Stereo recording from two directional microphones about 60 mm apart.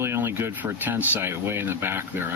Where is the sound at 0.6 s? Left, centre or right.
Right.